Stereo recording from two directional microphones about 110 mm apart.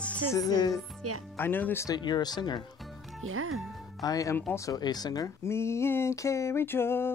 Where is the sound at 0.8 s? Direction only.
Centre (ahead or behind).